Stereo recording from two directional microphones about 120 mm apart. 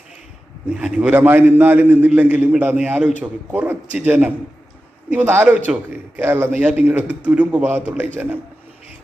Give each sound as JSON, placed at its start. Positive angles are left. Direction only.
{"t": 0.7, "sound": "a man's voice", "side_deg": -10}